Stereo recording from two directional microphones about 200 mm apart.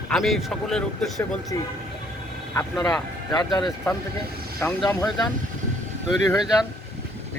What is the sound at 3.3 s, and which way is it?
Speech, 20° left (ahead or behind).